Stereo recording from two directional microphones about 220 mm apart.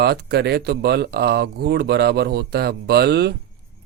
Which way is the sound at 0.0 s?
50° right (ahead or behind).